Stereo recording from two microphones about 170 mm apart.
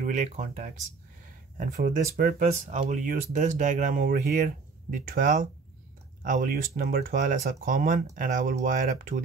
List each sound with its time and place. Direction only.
0.0 s speech: 45° right (ahead or behind)